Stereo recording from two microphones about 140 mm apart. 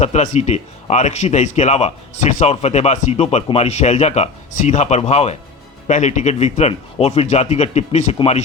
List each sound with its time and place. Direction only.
0.0 s speech: 55° left (ahead or behind)